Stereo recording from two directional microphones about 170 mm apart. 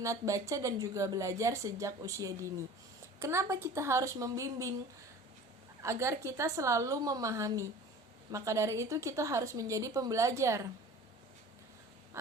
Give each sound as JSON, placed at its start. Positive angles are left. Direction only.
{"t": 0.0, "sound": "a woman's voice", "side_deg": -20}
{"t": 5.8, "sound": "a woman's voice", "side_deg": -15}
{"t": 12.1, "sound": "a sound", "side_deg": -15}